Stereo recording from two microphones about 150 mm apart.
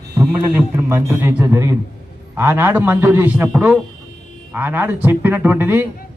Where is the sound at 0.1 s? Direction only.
20° right (ahead or behind).